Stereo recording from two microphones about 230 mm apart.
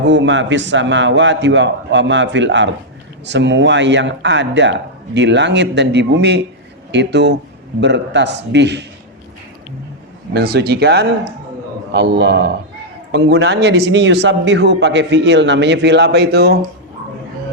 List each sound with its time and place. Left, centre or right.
0.1 s a man's voice: right
10.3 s a man's voice: right